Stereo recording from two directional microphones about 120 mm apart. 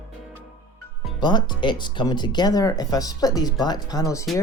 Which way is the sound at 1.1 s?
40° left (ahead or behind).